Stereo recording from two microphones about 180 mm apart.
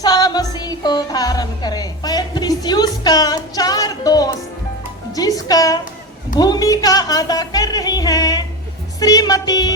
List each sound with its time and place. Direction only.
0.0 s music: 20° left (ahead or behind)
9.0 s speech: 20° left (ahead or behind)